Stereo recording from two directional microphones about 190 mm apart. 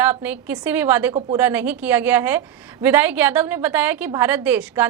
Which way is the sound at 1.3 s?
10° right (ahead or behind).